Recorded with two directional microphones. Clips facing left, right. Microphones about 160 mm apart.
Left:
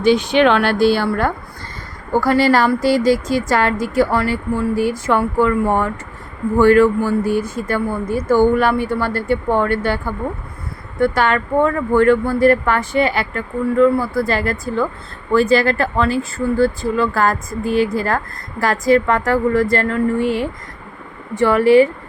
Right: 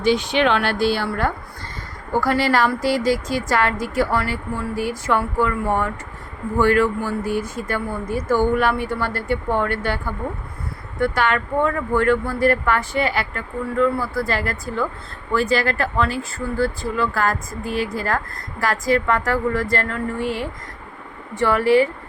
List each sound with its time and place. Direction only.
0.0 s speech: 50° left (ahead or behind)
2.2 s speech: 30° left (ahead or behind)
11.0 s speech: 30° left (ahead or behind)